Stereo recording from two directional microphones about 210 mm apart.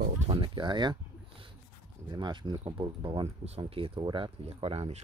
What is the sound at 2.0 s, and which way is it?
Speech, 20° right (ahead or behind).